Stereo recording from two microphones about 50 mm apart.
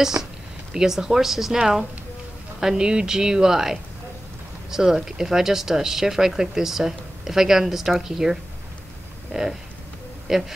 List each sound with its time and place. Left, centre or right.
0.2 s speech: right
0.7 s speech: centre
2.6 s speech: centre